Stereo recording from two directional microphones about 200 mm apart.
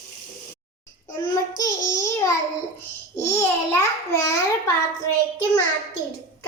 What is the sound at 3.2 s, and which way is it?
Babbling, 15° left (ahead or behind).